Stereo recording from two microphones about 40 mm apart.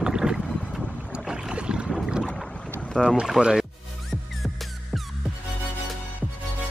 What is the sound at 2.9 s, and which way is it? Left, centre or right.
Speech, centre.